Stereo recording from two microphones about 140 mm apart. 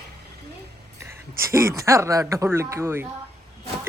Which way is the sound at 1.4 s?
20° right (ahead or behind).